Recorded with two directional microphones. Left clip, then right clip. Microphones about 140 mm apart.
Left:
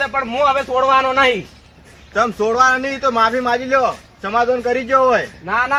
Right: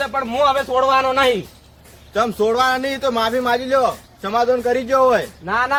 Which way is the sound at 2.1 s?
30° right (ahead or behind).